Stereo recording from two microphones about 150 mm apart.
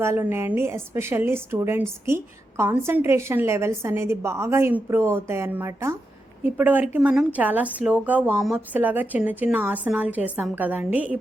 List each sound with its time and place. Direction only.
0.0 s a woman's voice: 15° right (ahead or behind)